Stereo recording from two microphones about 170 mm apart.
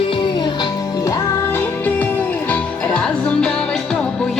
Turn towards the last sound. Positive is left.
turn(degrees=5)  # may be behind; listen again after turning